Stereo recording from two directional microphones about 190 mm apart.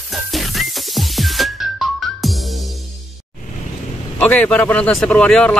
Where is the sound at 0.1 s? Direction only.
Centre (ahead or behind).